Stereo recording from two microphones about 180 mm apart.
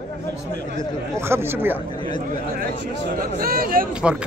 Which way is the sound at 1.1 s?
15° right (ahead or behind).